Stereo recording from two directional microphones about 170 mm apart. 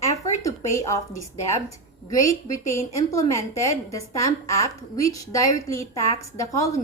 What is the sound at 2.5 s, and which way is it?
A woman's voice, 20° left (ahead or behind).